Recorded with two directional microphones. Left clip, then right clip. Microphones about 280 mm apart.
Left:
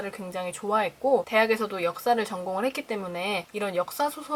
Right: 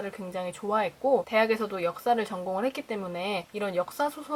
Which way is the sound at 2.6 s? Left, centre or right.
Centre.